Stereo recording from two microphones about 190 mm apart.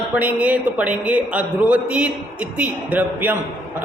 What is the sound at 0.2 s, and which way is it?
A man's voice, 5° right (ahead or behind).